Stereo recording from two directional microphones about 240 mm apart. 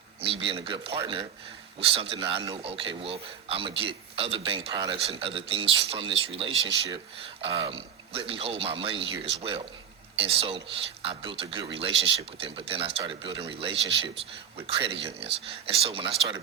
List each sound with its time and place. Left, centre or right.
0.2 s a man's voice: right